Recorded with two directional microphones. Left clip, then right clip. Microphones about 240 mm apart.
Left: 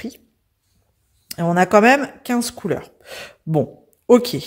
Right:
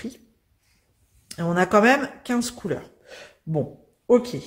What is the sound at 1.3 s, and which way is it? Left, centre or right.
Speech, left.